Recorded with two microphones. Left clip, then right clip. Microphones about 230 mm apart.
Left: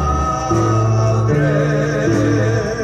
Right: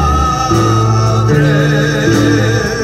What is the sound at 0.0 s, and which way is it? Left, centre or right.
Music, right.